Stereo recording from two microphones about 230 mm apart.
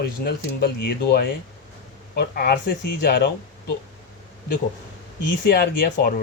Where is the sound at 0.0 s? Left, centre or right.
Left.